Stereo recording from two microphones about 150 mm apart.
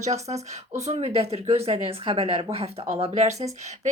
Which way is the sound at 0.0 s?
45° right (ahead or behind).